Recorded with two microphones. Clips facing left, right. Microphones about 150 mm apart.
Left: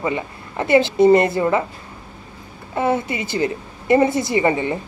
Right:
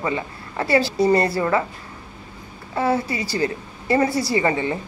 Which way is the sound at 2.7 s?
20° left (ahead or behind).